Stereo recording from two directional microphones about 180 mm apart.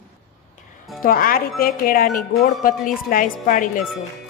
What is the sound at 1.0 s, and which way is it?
Speech, 55° left (ahead or behind).